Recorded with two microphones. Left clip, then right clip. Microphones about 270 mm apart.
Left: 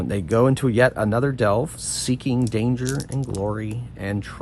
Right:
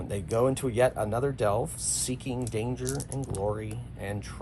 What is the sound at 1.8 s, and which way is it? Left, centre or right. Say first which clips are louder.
Speech: left 4 dB; centre.